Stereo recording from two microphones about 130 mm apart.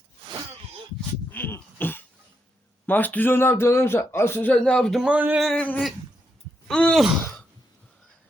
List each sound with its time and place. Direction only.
1.3 s cough: 15° left (ahead or behind)
2.8 s speech: 15° left (ahead or behind); by 5.4 s 10° right (ahead or behind)
5.4 s speech: 5° left (ahead or behind)
7.0 s a sound: centre (ahead or behind)